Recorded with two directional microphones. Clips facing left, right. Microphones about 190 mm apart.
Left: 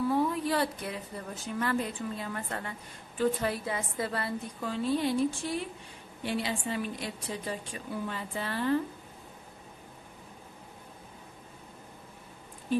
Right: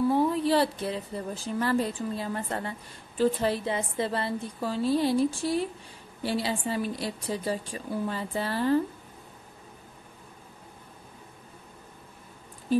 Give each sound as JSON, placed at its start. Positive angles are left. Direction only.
{"t": 0.1, "sound": "a woman's voice", "side_deg": -30}